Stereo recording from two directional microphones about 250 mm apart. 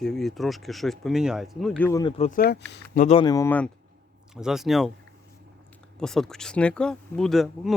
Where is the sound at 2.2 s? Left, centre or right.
Left; by 4.9 s centre.